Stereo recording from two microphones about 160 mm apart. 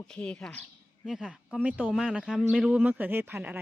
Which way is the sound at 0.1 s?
5° left (ahead or behind).